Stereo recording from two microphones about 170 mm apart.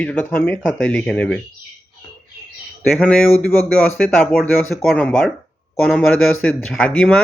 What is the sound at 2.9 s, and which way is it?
Speech, 5° left (ahead or behind).